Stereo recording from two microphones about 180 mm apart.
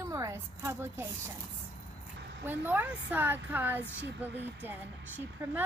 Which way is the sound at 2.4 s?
10° right (ahead or behind).